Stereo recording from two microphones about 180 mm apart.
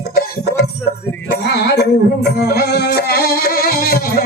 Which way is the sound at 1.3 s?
70° left (ahead or behind).